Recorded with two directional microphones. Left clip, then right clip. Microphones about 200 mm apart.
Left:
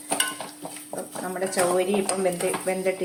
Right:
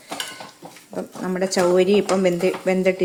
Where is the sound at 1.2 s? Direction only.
50° right (ahead or behind).